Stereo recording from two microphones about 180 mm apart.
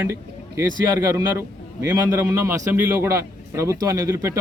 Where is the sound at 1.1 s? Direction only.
15° right (ahead or behind).